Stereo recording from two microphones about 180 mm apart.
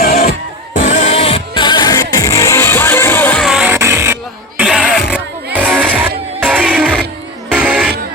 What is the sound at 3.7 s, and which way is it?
Music, 15° right (ahead or behind).